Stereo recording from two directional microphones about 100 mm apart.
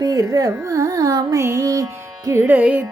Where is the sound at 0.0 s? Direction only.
35° right (ahead or behind).